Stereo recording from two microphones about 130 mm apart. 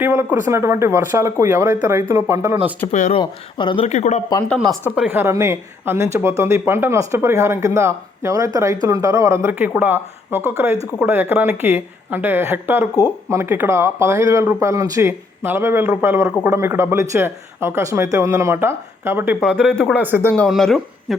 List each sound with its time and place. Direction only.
0.0 s speech: 15° right (ahead or behind)
3.1 s speech: 40° left (ahead or behind)
3.8 s speech: 60° left (ahead or behind)
4.9 s speech: 15° right (ahead or behind)
19.4 s speech: 5° left (ahead or behind)
19.9 s speech: 15° right (ahead or behind)
20.5 s speech: centre (ahead or behind)